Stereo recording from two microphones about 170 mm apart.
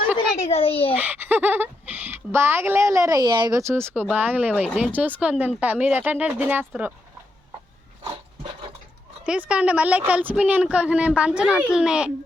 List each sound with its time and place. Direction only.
0.5 s a child's voice: 35° left (ahead or behind)
0.9 s speech: 10° right (ahead or behind)
9.2 s speech: 5° right (ahead or behind)